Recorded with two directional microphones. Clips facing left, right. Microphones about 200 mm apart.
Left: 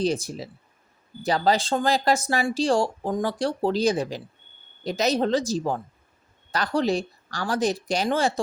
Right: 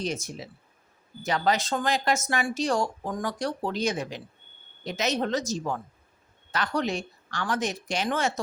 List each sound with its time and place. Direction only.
0.0 s speech: 35° left (ahead or behind)